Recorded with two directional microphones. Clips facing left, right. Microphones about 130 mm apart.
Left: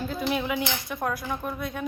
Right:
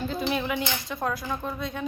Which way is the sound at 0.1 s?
5° left (ahead or behind).